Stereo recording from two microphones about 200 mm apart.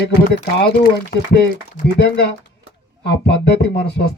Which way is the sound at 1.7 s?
55° left (ahead or behind).